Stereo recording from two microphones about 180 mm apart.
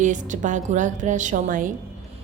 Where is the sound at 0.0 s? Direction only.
45° right (ahead or behind).